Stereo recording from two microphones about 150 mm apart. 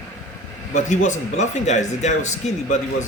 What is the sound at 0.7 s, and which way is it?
Speech, 50° left (ahead or behind).